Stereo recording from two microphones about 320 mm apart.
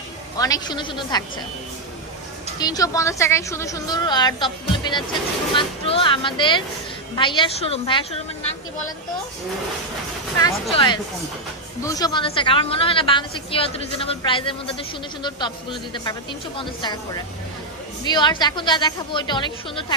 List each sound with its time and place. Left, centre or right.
0.3 s a woman's voice: centre
2.6 s a woman's voice: centre
10.4 s a woman's voice: centre
18.0 s a woman's voice: centre